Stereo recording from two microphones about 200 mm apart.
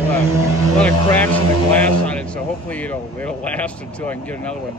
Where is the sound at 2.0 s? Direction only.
5° left (ahead or behind).